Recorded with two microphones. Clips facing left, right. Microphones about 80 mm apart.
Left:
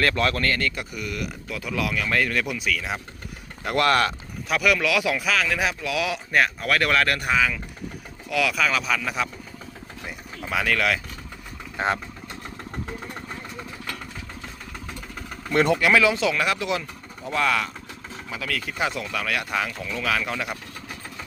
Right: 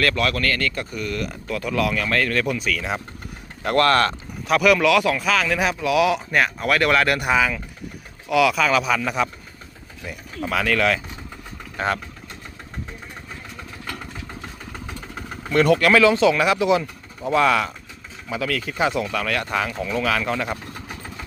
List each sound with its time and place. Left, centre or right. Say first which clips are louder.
0.0 s speech: right 1 dB; left
0.9 s speech: right 4 dB; centre
3.8 s speech: right 3 dB; centre
10.4 s speech: right 3 dB; centre
11.8 s speech: right 1 dB; left
15.5 s speech: right 3 dB; left
15.8 s speech: right 4 dB; centre